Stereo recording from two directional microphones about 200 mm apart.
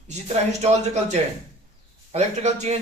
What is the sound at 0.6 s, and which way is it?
A man's voice, 35° right (ahead or behind).